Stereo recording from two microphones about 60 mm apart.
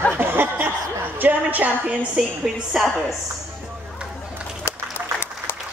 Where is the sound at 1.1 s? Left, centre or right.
Right.